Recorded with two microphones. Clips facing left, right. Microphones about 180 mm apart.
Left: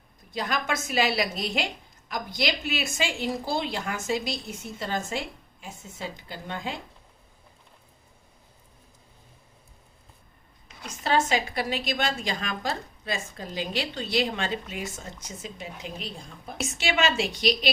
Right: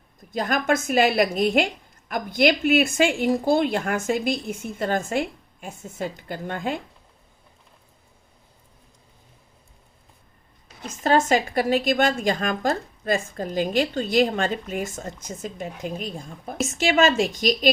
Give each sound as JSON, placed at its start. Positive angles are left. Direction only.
{"t": 0.3, "sound": "a woman's voice", "side_deg": -50}
{"t": 10.8, "sound": "a woman's voice", "side_deg": -45}